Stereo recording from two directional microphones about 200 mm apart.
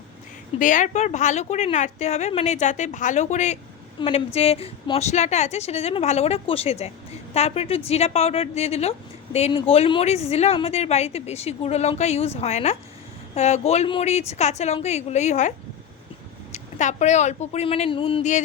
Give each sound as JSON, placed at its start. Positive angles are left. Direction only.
{"t": 0.6, "sound": "speech", "side_deg": 40}
{"t": 4.0, "sound": "a woman's voice", "side_deg": 25}